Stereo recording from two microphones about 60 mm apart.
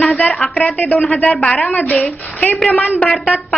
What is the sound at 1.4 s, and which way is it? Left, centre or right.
Speech, centre.